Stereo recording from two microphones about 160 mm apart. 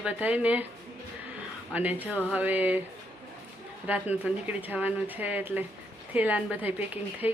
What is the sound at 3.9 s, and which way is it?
A woman's voice, 10° right (ahead or behind).